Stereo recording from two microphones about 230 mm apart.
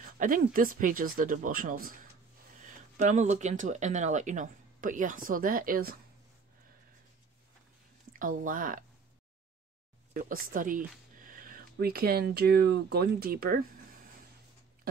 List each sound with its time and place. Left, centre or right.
0.2 s speech: right
8.2 s speech: right
10.1 s speech: right